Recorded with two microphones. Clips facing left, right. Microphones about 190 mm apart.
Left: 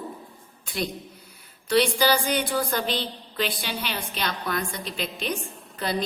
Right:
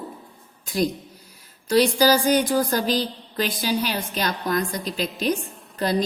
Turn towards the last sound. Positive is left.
turn(degrees=-40)  # may be behind; listen again after turning